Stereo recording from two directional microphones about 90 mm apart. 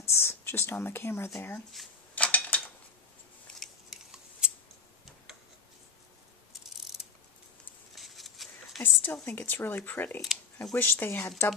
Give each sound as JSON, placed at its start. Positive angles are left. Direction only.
{"t": 0.0, "sound": "speech", "side_deg": 30}
{"t": 2.1, "sound": "a sound", "side_deg": 15}
{"t": 3.5, "sound": "scissors", "side_deg": 5}
{"t": 6.6, "sound": "pulleys", "side_deg": -5}
{"t": 7.9, "sound": "a sound", "side_deg": 0}
{"t": 8.8, "sound": "speech", "side_deg": 25}